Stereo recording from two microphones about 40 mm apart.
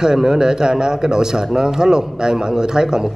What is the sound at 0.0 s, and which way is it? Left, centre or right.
Speech, centre.